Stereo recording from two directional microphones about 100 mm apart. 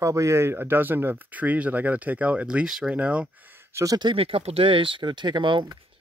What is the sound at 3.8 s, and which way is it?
Speech, 40° right (ahead or behind).